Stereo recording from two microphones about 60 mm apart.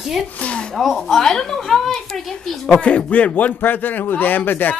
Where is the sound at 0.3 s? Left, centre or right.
Left.